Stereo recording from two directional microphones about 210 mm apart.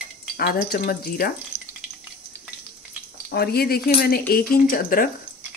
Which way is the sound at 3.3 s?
50° left (ahead or behind).